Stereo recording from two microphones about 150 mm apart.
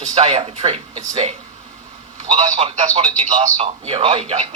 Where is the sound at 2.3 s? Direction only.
40° right (ahead or behind).